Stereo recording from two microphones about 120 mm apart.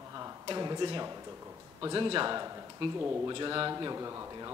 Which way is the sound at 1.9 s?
40° right (ahead or behind).